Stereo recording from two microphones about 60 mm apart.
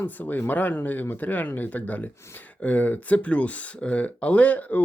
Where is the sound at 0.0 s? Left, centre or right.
Left.